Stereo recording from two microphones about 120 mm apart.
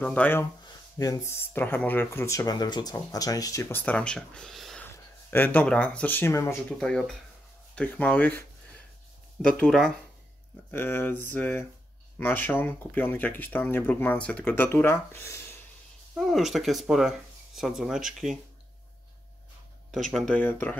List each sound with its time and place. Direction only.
0.0 s speech: 10° left (ahead or behind)
0.7 s speech: 30° left (ahead or behind)
3.8 s speech: 10° left (ahead or behind)
4.9 s speech: 15° left (ahead or behind)
6.8 s speech: 5° left (ahead or behind)
10.7 s speech: 20° left (ahead or behind)
16.2 s speech: centre (ahead or behind)
19.9 s speech: centre (ahead or behind)
20.3 s speech: 15° left (ahead or behind)